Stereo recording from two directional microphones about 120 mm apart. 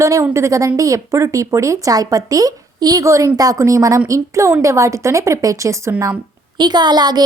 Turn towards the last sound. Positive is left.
turn(degrees=-35)  # may be behind; listen again after turning